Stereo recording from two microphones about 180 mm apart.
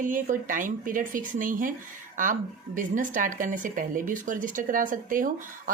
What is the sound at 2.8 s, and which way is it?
Speech, 45° right (ahead or behind).